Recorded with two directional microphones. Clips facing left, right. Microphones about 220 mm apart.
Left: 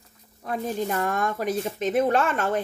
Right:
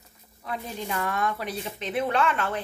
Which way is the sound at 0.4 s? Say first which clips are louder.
Left 6 dB; 45° left (ahead or behind).